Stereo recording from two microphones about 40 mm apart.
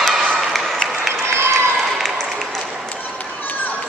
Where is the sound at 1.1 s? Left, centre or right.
Right.